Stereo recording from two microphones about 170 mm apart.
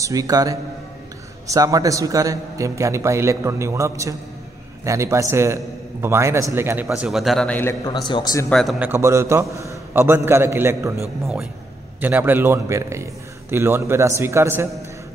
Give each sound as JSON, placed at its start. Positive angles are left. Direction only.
{"t": 0.0, "sound": "a man's voice", "side_deg": -20}
{"t": 8.1, "sound": "a man's voice", "side_deg": 20}
{"t": 8.5, "sound": "a man's voice", "side_deg": 5}
{"t": 8.7, "sound": "a man's voice", "side_deg": -15}
{"t": 12.0, "sound": "a man's voice", "side_deg": -10}